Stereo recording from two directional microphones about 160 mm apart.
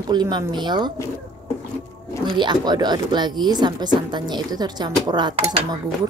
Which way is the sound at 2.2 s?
30° right (ahead or behind).